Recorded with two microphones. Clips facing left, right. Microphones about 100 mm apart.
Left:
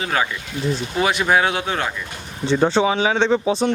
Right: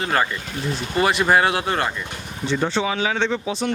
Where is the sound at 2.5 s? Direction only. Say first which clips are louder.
Left 5 dB; 30° left (ahead or behind).